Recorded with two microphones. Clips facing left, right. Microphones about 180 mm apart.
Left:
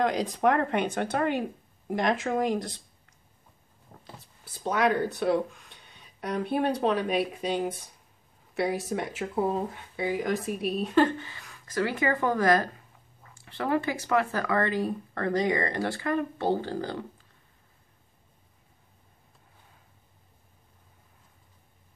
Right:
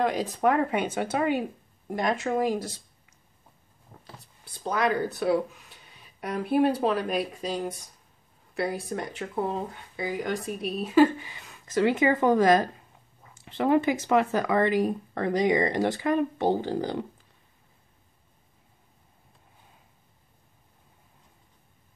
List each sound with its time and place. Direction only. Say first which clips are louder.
0.0 s speech: even; 5° right (ahead or behind)